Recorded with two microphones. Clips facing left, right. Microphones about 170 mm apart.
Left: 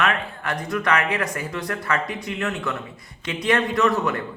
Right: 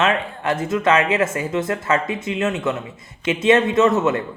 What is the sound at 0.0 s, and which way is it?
A man's voice, 25° right (ahead or behind).